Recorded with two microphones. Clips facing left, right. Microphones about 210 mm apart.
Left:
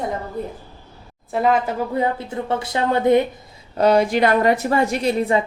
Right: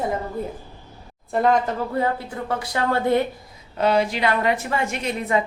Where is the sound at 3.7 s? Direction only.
45° left (ahead or behind).